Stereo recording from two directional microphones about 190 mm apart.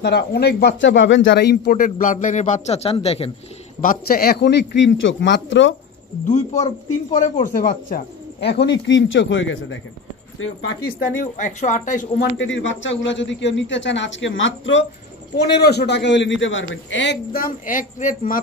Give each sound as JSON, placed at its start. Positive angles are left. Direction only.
{"t": 0.0, "sound": "a man's voice", "side_deg": 60}
{"t": 3.8, "sound": "a man's voice", "side_deg": 50}
{"t": 6.2, "sound": "speech", "side_deg": 35}
{"t": 7.4, "sound": "a man's voice", "side_deg": 50}
{"t": 10.8, "sound": "speech", "side_deg": 45}
{"t": 12.2, "sound": "a man's voice", "side_deg": 80}
{"t": 15.3, "sound": "a man's voice", "side_deg": 60}
{"t": 16.9, "sound": "speech", "side_deg": 65}